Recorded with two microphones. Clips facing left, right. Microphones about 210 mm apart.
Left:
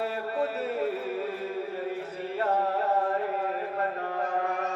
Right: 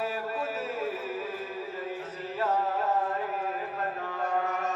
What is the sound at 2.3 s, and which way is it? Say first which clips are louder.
Music: left 1 dB; 60° left (ahead or behind).